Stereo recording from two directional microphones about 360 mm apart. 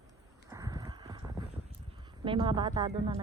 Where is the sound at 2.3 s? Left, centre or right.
Centre.